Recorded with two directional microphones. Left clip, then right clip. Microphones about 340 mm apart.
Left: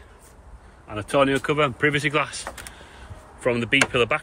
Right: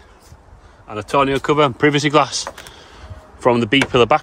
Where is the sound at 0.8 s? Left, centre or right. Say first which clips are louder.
Right 4 dB; centre.